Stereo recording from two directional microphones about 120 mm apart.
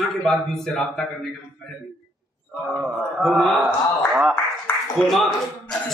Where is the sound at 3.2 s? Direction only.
5° left (ahead or behind).